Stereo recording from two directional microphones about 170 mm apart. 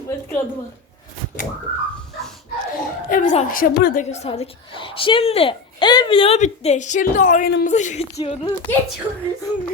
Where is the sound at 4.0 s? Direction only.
40° left (ahead or behind).